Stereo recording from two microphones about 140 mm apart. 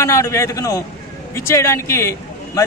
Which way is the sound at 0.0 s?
20° left (ahead or behind).